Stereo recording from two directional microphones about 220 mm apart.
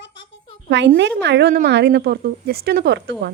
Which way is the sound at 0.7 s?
55° right (ahead or behind).